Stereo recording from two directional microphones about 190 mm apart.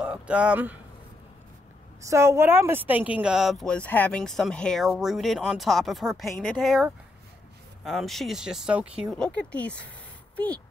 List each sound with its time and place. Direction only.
0.0 s speech: 5° right (ahead or behind)
2.0 s speech: 15° right (ahead or behind)
9.1 s speech: 5° left (ahead or behind)